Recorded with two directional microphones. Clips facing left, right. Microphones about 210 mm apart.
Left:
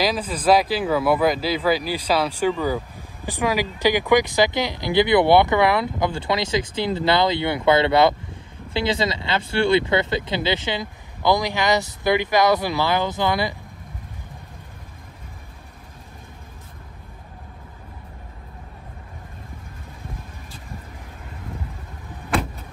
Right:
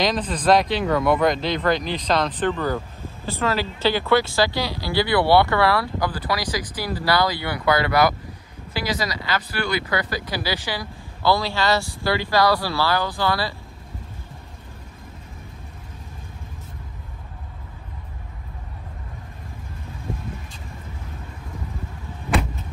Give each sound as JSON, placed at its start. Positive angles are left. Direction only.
{"t": 0.0, "sound": "speech", "side_deg": 5}